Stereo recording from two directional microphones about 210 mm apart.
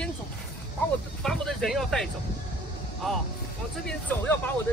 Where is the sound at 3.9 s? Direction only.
10° left (ahead or behind).